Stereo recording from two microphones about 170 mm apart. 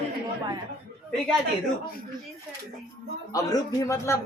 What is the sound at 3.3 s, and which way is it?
Speech, 20° left (ahead or behind).